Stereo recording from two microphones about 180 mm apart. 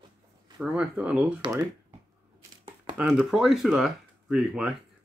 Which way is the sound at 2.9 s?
5° right (ahead or behind).